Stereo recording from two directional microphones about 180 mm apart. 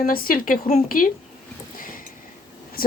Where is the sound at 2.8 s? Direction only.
55° left (ahead or behind).